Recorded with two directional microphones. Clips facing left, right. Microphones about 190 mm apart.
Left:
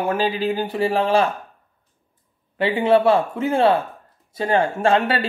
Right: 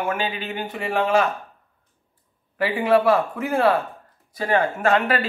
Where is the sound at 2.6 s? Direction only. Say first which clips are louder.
Left 2 dB; 25° left (ahead or behind).